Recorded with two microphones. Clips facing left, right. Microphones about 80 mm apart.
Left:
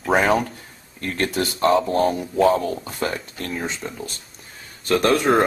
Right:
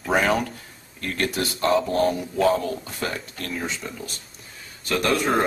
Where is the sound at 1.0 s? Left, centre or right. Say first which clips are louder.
Left 2 dB; left.